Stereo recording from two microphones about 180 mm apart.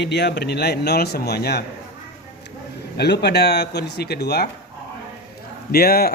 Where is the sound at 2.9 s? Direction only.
65° left (ahead or behind).